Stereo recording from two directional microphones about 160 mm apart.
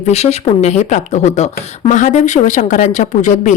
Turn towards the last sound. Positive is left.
turn(degrees=50)  # may be behind; listen again after turning